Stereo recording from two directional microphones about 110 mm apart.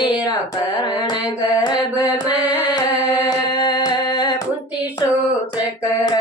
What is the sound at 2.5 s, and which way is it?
Singing, 40° left (ahead or behind).